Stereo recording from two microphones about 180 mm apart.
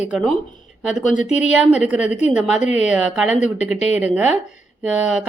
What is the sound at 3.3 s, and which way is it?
Speech, 40° left (ahead or behind).